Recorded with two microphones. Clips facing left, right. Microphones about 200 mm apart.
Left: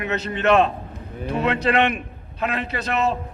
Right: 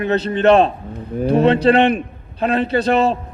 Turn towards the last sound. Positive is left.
turn(degrees=-30)  # may be behind; listen again after turning